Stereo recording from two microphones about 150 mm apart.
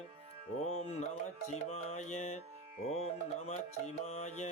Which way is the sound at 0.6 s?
45° left (ahead or behind).